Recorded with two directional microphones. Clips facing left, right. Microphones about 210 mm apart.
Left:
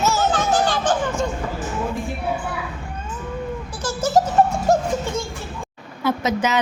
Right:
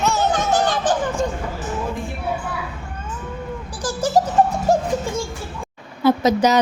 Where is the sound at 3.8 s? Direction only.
15° right (ahead or behind).